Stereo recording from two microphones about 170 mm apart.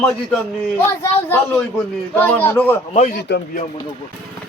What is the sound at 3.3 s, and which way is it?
Speech, 90° left.